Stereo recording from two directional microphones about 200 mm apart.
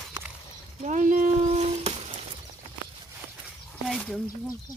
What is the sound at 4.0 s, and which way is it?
Speech, 5° left (ahead or behind).